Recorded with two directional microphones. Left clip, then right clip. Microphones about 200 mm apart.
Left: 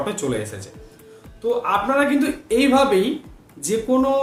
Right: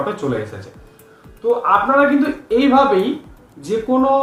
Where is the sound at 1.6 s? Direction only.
25° left (ahead or behind).